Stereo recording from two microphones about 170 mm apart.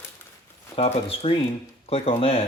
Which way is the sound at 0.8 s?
40° left (ahead or behind).